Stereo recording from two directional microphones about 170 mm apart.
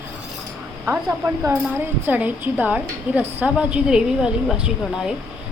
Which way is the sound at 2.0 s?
10° right (ahead or behind).